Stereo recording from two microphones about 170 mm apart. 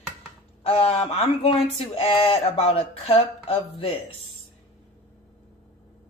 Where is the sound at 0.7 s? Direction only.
35° left (ahead or behind).